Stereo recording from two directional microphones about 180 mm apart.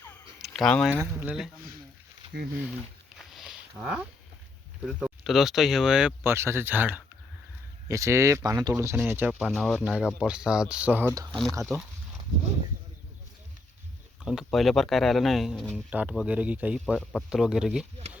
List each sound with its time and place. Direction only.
0.4 s speech: centre (ahead or behind)
1.2 s speech: 10° right (ahead or behind)
2.2 s a sound: 35° right (ahead or behind)
3.2 s a sound: centre (ahead or behind)
4.8 s speech: 5° right (ahead or behind)
9.4 s speech: centre (ahead or behind)
11.3 s speech: 5° left (ahead or behind)
14.3 s speech: centre (ahead or behind)